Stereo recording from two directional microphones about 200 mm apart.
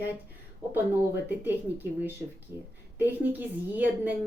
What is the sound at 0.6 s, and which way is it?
A woman's voice, 10° right (ahead or behind).